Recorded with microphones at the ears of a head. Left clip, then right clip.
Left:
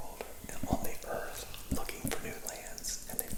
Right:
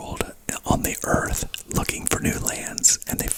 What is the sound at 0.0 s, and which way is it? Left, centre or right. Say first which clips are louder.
Whispering: right 14 dB; right.